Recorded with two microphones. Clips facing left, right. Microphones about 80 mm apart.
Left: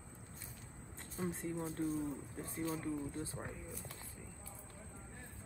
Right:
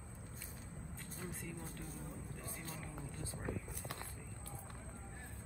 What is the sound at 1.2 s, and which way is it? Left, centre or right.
Speech, left.